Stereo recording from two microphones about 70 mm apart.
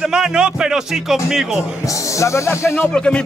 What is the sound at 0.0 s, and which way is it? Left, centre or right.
Speech, centre.